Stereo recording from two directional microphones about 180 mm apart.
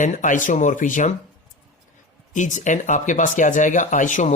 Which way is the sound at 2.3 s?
45° left (ahead or behind).